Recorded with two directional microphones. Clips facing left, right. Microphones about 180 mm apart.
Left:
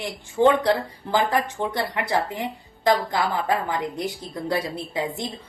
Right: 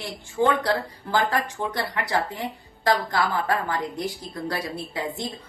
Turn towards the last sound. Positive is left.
turn(degrees=20)  # may be behind; listen again after turning